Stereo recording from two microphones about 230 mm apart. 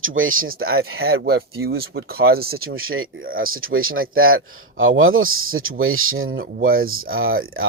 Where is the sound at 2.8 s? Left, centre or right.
Right.